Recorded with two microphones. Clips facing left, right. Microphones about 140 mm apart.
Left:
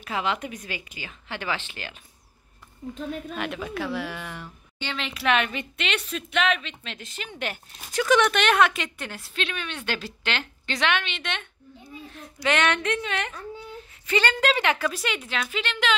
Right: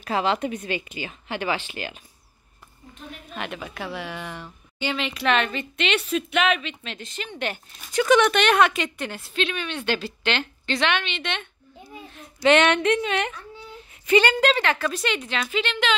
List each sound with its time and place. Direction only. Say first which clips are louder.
0.0 s speech: right 5 dB; 35° right (ahead or behind); by 2.0 s 15° right (ahead or behind)
3.3 s speech: right 2 dB; centre (ahead or behind)
5.8 s speech: right 7 dB; centre (ahead or behind)
12.4 s speech: right 6 dB; 20° right (ahead or behind)
14.6 s speech: right 1 dB; 15° left (ahead or behind)